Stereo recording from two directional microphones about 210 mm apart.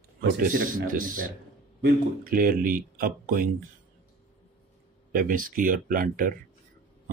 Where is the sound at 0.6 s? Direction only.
40° right (ahead or behind).